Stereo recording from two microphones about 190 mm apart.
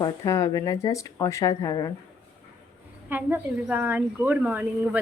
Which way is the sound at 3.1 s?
10° right (ahead or behind).